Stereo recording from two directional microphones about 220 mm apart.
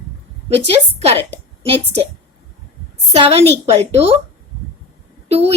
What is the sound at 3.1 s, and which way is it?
A woman's voice, 25° right (ahead or behind).